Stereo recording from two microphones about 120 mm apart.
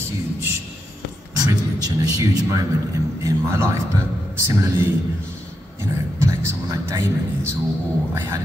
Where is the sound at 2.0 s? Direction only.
25° right (ahead or behind).